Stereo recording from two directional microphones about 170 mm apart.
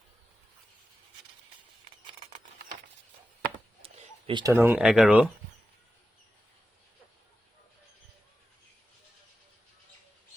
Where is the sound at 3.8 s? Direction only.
35° right (ahead or behind).